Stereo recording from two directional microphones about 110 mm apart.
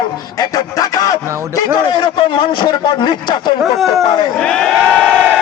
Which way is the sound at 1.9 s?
50° left (ahead or behind).